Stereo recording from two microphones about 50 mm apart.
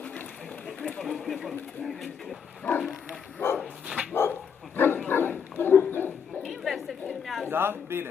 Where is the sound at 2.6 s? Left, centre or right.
Left.